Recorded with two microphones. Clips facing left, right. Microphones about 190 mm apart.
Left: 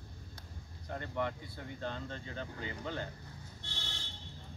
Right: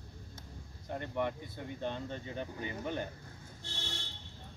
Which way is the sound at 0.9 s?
20° right (ahead or behind).